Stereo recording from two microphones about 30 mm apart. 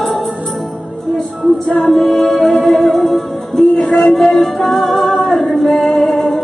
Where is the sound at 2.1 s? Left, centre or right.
Centre.